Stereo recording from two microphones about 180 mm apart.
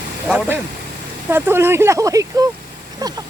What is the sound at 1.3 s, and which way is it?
Speech, 10° right (ahead or behind).